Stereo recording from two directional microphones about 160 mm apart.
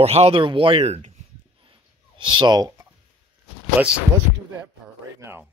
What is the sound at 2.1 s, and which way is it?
Speech, 30° right (ahead or behind).